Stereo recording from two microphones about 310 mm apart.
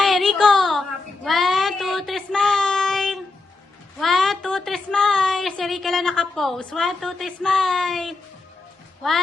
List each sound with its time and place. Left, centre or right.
0.0 s child singing: centre
3.9 s speech: centre